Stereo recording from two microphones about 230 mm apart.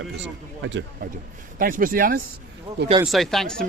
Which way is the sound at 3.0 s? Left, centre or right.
Centre.